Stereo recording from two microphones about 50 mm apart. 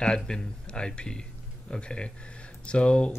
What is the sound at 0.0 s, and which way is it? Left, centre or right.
Speech, centre.